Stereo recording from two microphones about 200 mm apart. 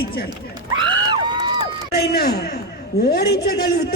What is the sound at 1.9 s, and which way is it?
A man's voice, 50° left (ahead or behind).